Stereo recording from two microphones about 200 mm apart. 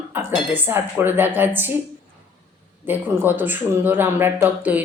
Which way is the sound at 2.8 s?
10° right (ahead or behind).